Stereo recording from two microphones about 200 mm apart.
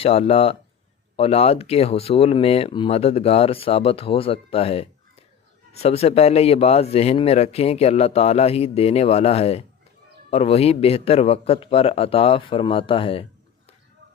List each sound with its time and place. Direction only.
0.0 s a man's voice: 30° left (ahead or behind)